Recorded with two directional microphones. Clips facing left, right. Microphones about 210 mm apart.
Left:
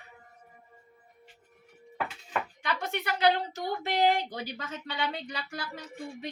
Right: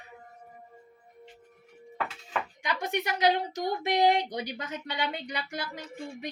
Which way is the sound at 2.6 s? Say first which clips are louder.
Right 4 dB; 15° right (ahead or behind).